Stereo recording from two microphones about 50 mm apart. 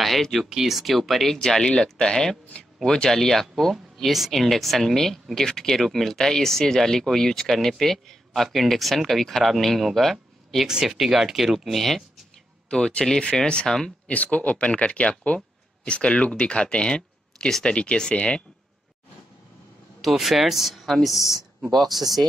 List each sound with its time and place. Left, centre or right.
0.0 s speech: centre
3.7 s speech: centre
12.6 s speech: centre
14.0 s speech: left
17.5 s speech: centre
17.7 s speech: centre
20.0 s speech: centre